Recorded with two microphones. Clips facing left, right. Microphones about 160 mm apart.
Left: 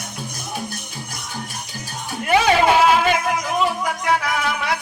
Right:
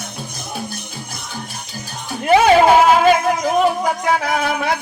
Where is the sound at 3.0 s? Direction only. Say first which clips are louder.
Right 6 dB; 45° right (ahead or behind).